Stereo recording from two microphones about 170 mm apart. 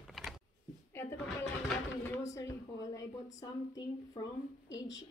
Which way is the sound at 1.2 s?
5° left (ahead or behind).